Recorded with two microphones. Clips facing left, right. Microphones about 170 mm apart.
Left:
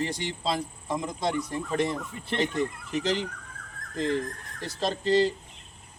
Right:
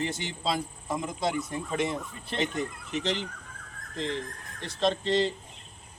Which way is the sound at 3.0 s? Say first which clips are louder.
Left 3 dB; 40° left (ahead or behind).